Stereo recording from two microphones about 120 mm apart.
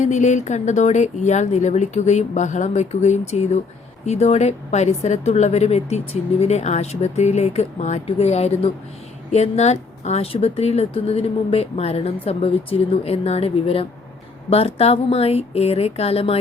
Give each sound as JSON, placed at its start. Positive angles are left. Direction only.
{"t": 0.0, "sound": "a woman's voice", "side_deg": 80}